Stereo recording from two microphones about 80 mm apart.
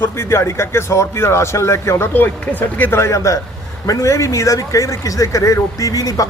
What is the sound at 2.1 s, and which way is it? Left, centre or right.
Speech, left.